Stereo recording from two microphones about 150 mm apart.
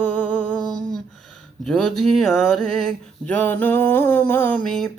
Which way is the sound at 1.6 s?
Centre (ahead or behind).